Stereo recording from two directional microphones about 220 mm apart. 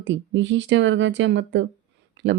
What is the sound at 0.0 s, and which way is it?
Speech, 55° right (ahead or behind).